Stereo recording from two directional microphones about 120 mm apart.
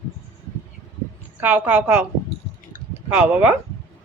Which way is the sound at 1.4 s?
15° right (ahead or behind).